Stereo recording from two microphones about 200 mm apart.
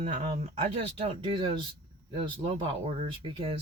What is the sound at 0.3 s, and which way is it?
Speech, 30° right (ahead or behind).